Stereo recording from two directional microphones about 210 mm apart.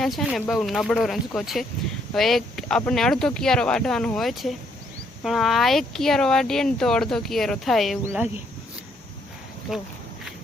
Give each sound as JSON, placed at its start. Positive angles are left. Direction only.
{"t": 0.0, "sound": "speech", "side_deg": 0}